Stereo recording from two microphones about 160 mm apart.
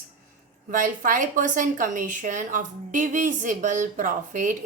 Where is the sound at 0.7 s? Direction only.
55° right (ahead or behind).